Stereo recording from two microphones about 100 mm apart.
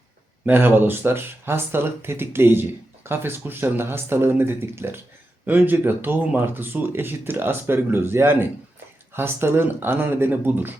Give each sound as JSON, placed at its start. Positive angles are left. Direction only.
{"t": 0.4, "sound": "speech", "side_deg": -20}